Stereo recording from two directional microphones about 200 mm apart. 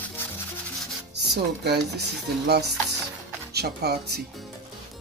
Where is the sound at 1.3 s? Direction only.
55° right (ahead or behind).